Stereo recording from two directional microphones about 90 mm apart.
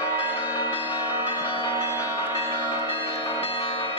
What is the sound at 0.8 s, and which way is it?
Change ringing, 20° right (ahead or behind).